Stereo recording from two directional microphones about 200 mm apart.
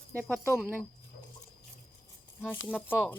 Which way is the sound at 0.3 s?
10° left (ahead or behind).